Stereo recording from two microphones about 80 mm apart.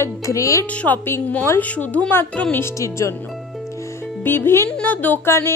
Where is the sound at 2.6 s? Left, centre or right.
Left.